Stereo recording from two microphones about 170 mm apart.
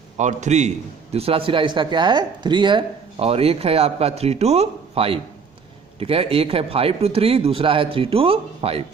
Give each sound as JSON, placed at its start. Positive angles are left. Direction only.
{"t": 0.2, "sound": "a man's voice", "side_deg": -45}